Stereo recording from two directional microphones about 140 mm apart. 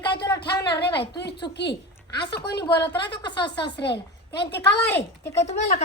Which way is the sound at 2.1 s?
35° left (ahead or behind).